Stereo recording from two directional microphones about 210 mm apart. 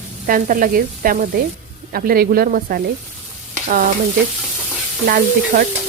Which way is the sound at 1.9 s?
45° right (ahead or behind).